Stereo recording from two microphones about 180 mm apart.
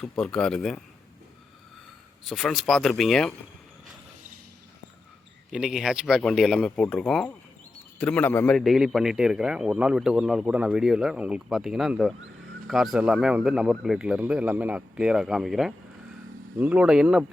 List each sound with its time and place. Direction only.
0.0 s a man's voice: 5° left (ahead or behind)
2.2 s a man's voice: centre (ahead or behind)
5.5 s a man's voice: centre (ahead or behind)